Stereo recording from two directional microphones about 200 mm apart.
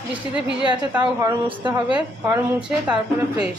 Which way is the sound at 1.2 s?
20° right (ahead or behind).